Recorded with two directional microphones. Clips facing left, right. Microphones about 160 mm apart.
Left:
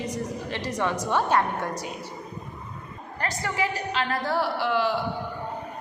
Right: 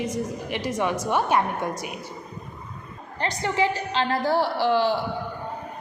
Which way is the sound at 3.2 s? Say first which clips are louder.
Right 4 dB; 25° right (ahead or behind).